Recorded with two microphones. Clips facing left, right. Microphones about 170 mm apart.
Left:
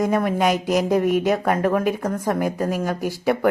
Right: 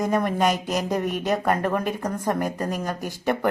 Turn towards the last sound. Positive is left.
turn(degrees=10)  # may be behind; listen again after turning